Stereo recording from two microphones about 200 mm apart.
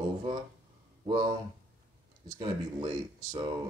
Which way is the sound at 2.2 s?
25° right (ahead or behind).